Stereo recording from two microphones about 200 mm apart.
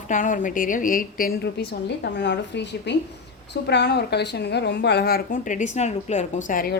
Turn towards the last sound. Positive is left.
turn(degrees=45)  # may be behind; listen again after turning